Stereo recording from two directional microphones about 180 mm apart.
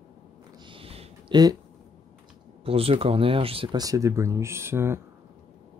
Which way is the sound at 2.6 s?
30° right (ahead or behind).